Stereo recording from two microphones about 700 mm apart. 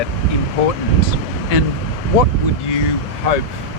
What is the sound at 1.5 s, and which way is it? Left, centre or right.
Speech, left.